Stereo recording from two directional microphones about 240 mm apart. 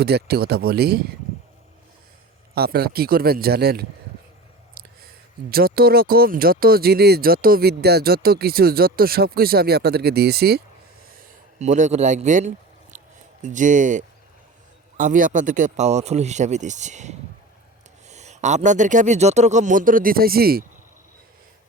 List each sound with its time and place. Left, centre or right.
0.0 s speech: right
2.6 s speech: right
5.5 s speech: right
11.1 s a sound: right
13.4 s speech: right